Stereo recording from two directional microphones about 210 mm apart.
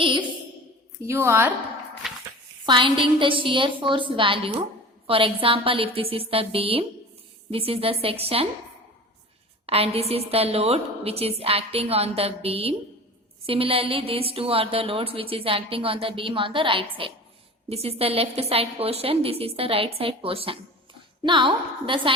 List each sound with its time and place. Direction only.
0.0 s a woman's voice: 25° right (ahead or behind)
1.0 s a woman's voice: 10° right (ahead or behind)
2.0 s a sound: centre (ahead or behind)
2.6 s a woman's voice: 25° right (ahead or behind)
9.6 s a woman's voice: 30° right (ahead or behind)